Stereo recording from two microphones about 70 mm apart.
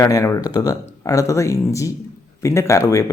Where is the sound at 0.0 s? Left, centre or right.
Left.